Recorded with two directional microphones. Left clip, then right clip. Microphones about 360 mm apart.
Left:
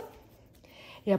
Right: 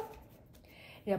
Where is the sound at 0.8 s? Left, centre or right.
Left.